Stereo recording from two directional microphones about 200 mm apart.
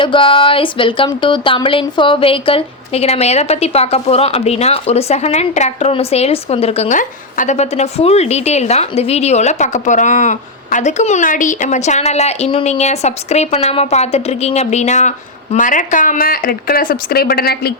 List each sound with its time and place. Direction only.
0.0 s speech: 25° left (ahead or behind); by 17.7 s 50° left (ahead or behind)